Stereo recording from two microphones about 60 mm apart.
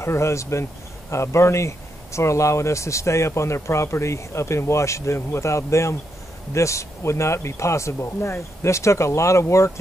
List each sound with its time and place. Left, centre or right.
0.0 s speech: left